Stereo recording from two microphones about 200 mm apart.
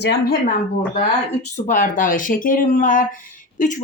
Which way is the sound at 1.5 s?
40° left (ahead or behind).